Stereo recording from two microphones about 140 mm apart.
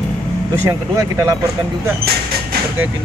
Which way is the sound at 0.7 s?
20° right (ahead or behind).